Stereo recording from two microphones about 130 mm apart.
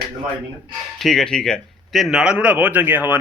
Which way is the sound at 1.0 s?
5° left (ahead or behind).